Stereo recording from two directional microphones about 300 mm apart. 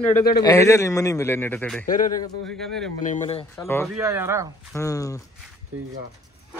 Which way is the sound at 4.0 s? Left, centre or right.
Centre.